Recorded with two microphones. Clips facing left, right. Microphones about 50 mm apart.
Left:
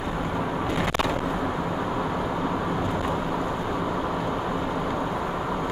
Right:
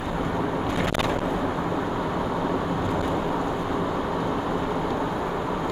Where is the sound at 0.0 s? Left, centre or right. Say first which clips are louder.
Right 1 dB; centre.